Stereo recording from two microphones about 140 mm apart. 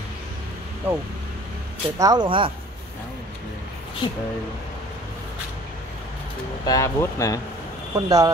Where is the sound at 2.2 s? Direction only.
35° right (ahead or behind).